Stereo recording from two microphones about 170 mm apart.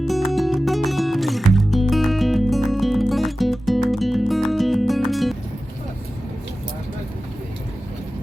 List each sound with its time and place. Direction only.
0.0 s music: centre (ahead or behind)